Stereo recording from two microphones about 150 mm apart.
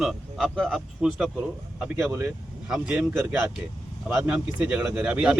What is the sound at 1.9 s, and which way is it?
Speech, 15° right (ahead or behind).